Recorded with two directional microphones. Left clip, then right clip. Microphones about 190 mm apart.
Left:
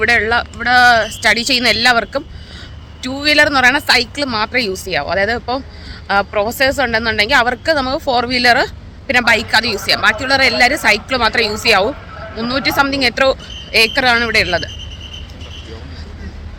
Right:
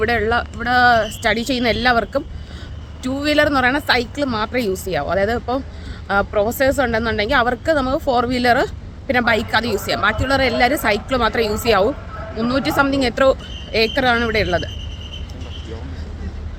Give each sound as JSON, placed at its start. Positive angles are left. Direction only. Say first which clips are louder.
{"t": 0.0, "sound": "speech", "louder": "left 5 dB", "side_deg": -5}